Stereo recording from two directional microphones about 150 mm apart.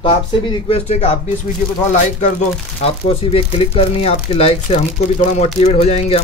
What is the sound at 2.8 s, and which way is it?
Speech, 40° left (ahead or behind).